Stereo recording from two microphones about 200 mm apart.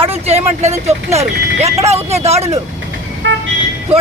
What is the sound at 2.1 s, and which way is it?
Speech, 30° right (ahead or behind).